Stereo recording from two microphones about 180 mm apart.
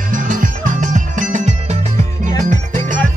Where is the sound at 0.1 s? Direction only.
50° right (ahead or behind).